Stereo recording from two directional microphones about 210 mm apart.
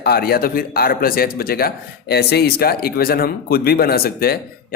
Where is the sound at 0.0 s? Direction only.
45° left (ahead or behind).